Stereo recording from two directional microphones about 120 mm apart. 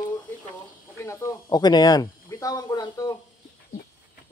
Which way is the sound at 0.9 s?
25° left (ahead or behind).